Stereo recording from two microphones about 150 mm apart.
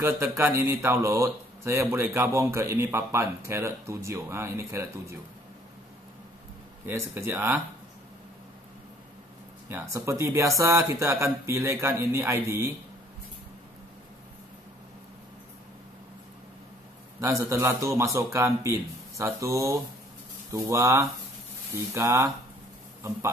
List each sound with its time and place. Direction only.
0.0 s speech: 15° right (ahead or behind)
6.9 s speech: 15° right (ahead or behind)
9.7 s speech: 15° right (ahead or behind)
17.2 s speech: 20° right (ahead or behind)